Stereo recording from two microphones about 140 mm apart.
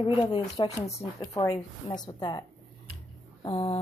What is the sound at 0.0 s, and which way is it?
A woman's voice, 35° left (ahead or behind).